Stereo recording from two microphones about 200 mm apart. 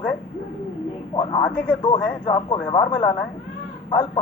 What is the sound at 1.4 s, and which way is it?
Speech, 5° left (ahead or behind).